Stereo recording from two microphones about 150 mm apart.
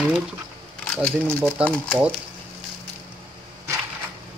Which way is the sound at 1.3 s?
5° left (ahead or behind).